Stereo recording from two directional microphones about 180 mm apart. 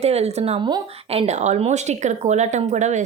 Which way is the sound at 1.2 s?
40° right (ahead or behind).